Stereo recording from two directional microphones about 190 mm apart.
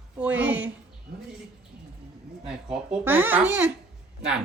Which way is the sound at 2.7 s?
5° right (ahead or behind).